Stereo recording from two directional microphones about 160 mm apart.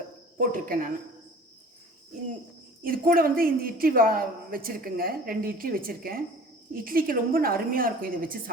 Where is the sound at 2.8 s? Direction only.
65° right (ahead or behind).